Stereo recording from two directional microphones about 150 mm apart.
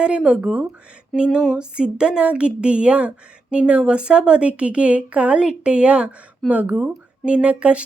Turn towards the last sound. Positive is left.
turn(degrees=-10)  # may be behind; listen again after turning